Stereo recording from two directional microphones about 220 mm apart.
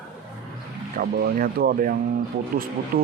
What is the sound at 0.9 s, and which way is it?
Speech, 40° right (ahead or behind).